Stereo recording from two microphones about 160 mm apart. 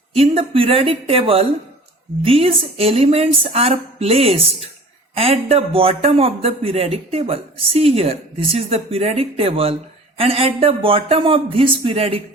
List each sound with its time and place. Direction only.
0.1 s a man's voice: 40° right (ahead or behind)